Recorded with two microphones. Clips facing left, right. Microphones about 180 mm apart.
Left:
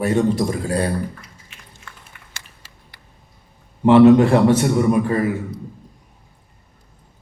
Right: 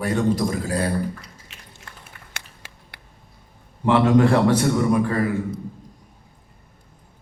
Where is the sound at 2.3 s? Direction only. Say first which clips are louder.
Right 3 dB; 60° right (ahead or behind).